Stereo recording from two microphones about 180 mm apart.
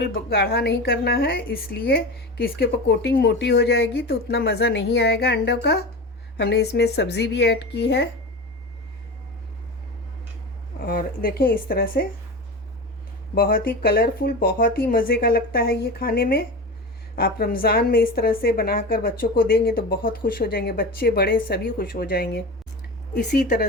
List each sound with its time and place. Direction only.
0.1 s a woman's voice: 60° left (ahead or behind)
10.8 s a woman's voice: 55° left (ahead or behind)
13.3 s a woman's voice: 55° left (ahead or behind)